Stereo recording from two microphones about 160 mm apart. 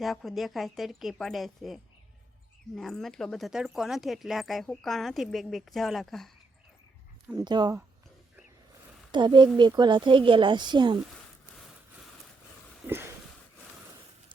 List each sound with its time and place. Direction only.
0.0 s speech: centre (ahead or behind)
7.3 s speech: 25° right (ahead or behind)
9.1 s speech: 30° right (ahead or behind)